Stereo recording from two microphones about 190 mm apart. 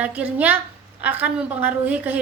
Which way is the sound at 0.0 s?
5° right (ahead or behind).